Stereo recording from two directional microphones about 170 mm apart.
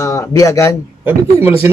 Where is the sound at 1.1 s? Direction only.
10° right (ahead or behind).